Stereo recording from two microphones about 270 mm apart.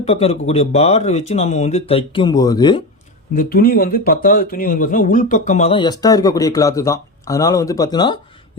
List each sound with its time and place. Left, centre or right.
0.0 s speech: left
3.3 s speech: left; by 8.2 s centre